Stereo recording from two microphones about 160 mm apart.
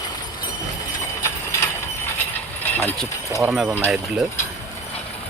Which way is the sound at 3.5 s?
5° right (ahead or behind).